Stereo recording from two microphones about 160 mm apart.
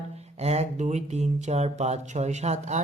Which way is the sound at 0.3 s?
40° right (ahead or behind).